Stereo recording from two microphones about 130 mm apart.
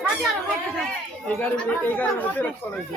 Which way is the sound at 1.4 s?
10° left (ahead or behind).